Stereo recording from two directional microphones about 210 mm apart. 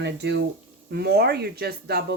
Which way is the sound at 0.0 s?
55° right (ahead or behind).